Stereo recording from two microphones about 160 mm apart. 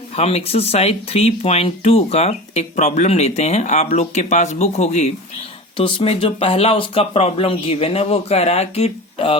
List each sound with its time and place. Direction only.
0.2 s speech: 40° left (ahead or behind)